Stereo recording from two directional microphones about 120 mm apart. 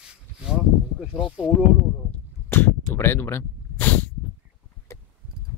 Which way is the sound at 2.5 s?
20° left (ahead or behind).